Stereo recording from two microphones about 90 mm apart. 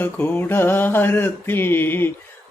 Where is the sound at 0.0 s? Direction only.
20° left (ahead or behind).